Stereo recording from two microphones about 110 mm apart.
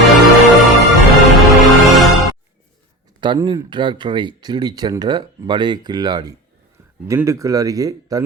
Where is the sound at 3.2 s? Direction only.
45° right (ahead or behind).